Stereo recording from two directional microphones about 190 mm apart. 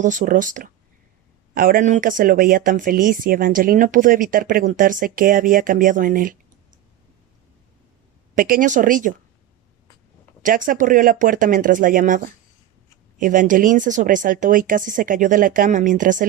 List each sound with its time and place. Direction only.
0.0 s speech: 40° right (ahead or behind)
8.4 s speech: 45° right (ahead or behind)
10.4 s speech: 45° right (ahead or behind)